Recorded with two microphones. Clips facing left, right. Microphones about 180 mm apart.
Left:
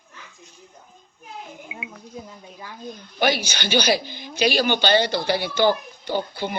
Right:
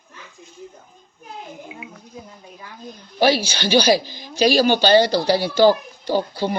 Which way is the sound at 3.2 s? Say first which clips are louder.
Right 5 dB; 30° right (ahead or behind).